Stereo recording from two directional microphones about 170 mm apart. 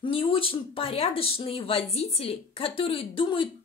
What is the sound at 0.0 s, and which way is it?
A woman's voice, 30° left (ahead or behind).